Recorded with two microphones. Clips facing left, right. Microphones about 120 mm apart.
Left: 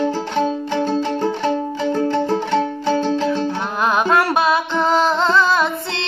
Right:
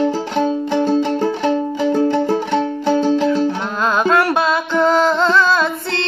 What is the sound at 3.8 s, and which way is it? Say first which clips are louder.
Music: right 1 dB; 20° left (ahead or behind).